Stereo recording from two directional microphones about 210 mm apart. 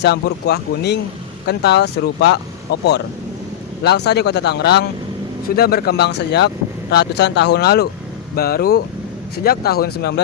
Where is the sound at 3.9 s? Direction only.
50° left (ahead or behind).